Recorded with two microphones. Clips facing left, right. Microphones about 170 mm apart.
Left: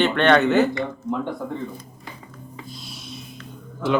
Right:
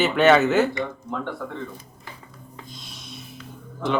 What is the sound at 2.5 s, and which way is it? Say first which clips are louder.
Music: left 3 dB; centre (ahead or behind).